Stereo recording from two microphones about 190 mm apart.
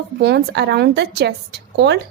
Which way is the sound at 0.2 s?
60° right (ahead or behind).